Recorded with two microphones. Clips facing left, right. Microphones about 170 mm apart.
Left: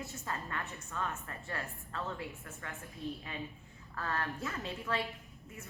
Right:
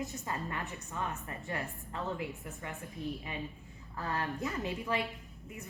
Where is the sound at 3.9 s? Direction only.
15° right (ahead or behind).